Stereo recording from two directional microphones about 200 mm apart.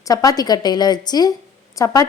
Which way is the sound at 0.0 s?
15° left (ahead or behind).